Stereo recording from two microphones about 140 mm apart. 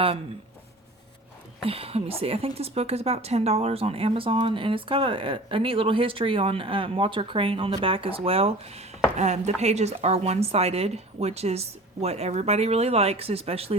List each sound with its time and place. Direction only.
1.6 s a woman's voice: 45° right (ahead or behind)